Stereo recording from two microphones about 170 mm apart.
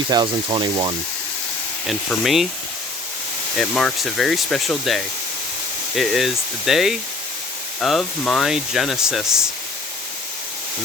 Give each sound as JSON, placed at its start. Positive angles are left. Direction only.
{"t": 0.1, "sound": "speech", "side_deg": -25}
{"t": 1.9, "sound": "speech", "side_deg": 0}
{"t": 3.6, "sound": "speech", "side_deg": 0}